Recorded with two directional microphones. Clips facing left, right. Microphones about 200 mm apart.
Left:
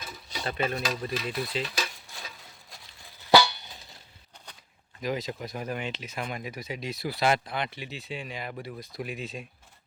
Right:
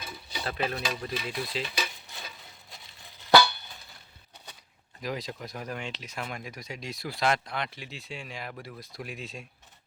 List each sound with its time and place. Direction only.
0.0 s stir: 5° right (ahead or behind)
2.1 s a sound: centre (ahead or behind)
3.3 s music: 15° left (ahead or behind)
5.0 s speech: centre (ahead or behind)